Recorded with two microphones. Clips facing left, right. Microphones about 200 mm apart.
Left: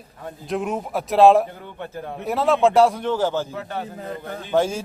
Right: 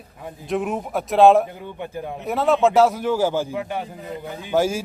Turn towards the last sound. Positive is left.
turn(degrees=-5)  # may be behind; listen again after turning